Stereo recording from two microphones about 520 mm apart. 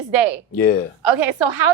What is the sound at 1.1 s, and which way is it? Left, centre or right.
Speech, right.